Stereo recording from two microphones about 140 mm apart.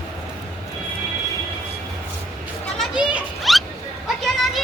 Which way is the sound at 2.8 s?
5° right (ahead or behind).